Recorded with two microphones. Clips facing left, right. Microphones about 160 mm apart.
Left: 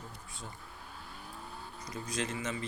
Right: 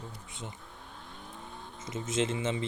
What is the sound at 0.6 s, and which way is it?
Vehicle, 5° left (ahead or behind).